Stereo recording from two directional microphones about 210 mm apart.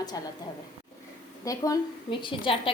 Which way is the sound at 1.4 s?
15° left (ahead or behind).